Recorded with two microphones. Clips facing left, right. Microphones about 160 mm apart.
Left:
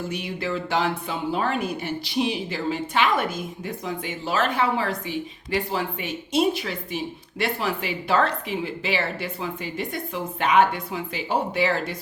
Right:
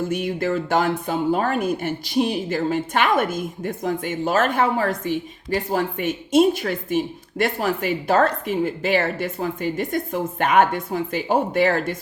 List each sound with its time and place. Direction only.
0.1 s speech: 50° right (ahead or behind)